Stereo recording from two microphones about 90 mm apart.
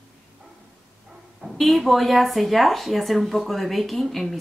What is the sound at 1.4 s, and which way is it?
Speech, centre (ahead or behind).